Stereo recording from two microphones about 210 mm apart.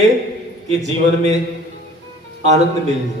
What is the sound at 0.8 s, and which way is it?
Speech, 35° right (ahead or behind).